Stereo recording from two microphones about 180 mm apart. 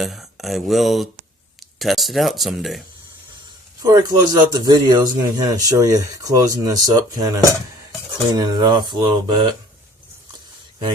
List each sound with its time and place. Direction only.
0.0 s speech: centre (ahead or behind)
3.8 s speech: 20° right (ahead or behind)
8.3 s speech: 20° right (ahead or behind)